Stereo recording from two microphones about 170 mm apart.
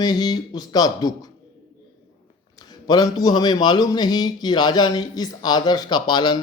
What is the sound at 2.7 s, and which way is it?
Speech, 25° left (ahead or behind).